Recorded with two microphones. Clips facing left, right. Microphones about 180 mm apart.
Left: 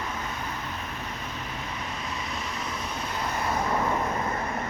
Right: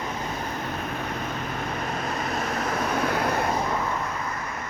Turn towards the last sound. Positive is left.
turn(degrees=-65)  # may be behind; listen again after turning